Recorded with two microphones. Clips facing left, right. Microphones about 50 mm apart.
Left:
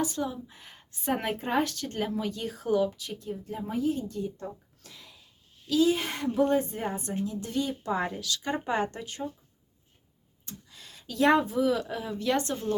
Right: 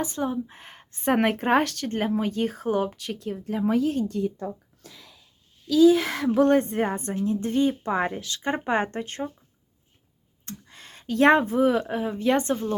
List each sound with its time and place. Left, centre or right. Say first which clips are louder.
0.0 s speech: right 3 dB; right
1.9 s speech: right 5 dB; right
2.9 s speech: right 5 dB; right
6.1 s speech: right 5 dB; right
6.6 s speech: right 6 dB; right
10.4 s speech: right 5 dB; right